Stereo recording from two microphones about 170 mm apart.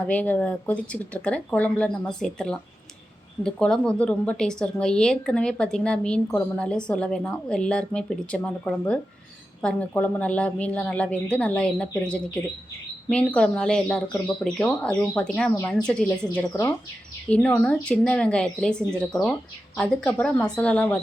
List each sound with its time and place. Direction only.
0.0 s a woman's voice: 10° left (ahead or behind)
16.5 s a woman's voice: 20° left (ahead or behind)
17.2 s a woman's voice: 5° left (ahead or behind)